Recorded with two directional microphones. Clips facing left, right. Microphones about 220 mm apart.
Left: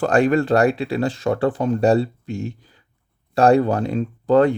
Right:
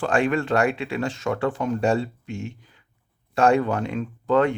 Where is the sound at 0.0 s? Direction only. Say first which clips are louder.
Left 5 dB; 40° left (ahead or behind).